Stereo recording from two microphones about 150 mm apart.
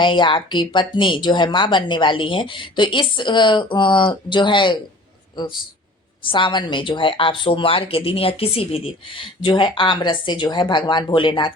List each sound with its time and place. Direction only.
0.0 s a woman's voice: 30° left (ahead or behind)
6.2 s a woman's voice: 35° left (ahead or behind)